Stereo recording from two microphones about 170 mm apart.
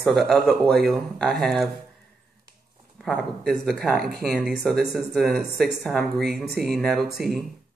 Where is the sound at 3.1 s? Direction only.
Centre (ahead or behind).